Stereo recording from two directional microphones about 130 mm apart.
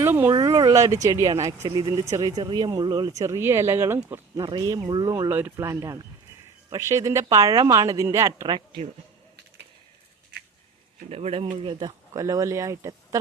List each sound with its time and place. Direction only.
0.0 s a sound: 15° right (ahead or behind)
0.3 s speech: 30° right (ahead or behind)
4.4 s speech: 35° right (ahead or behind)
5.1 s speech: 20° right (ahead or behind)
11.1 s speech: 50° right (ahead or behind)
11.5 s speech: 40° right (ahead or behind)